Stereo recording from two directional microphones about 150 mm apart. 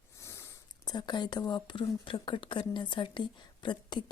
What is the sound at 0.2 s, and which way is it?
Speech, 15° left (ahead or behind).